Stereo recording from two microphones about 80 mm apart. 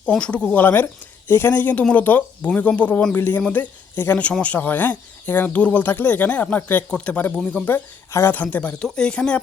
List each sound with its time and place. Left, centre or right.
0.2 s speech: centre
0.6 s speech: left